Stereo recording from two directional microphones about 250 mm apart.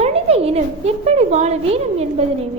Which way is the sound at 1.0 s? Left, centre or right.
Right.